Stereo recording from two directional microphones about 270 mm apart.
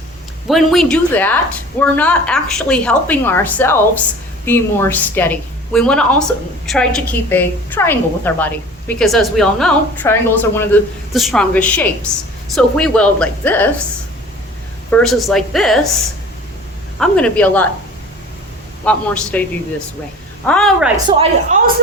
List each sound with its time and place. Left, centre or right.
0.4 s a woman's voice: centre
14.8 s a woman's voice: centre
17.0 s a woman's voice: centre
18.9 s a woman's voice: centre
20.5 s a woman's voice: centre
20.9 s speech: right